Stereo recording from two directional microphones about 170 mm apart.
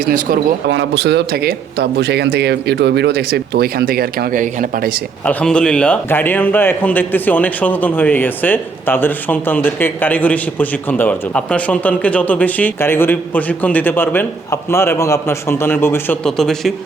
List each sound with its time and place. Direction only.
0.1 s speech: 85° right; by 4.9 s 55° right (ahead or behind)
5.2 s speech: 5° left (ahead or behind)
16.2 s a man's voice: centre (ahead or behind)